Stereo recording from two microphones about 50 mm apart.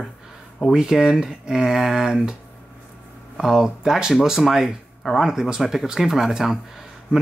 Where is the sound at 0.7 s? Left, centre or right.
Centre.